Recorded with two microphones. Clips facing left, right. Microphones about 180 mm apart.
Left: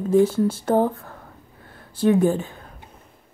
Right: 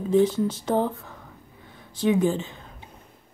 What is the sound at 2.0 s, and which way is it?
Speech, 55° left (ahead or behind).